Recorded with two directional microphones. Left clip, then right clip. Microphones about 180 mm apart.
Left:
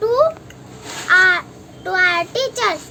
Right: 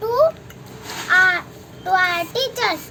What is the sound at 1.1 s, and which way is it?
Crow, 15° left (ahead or behind).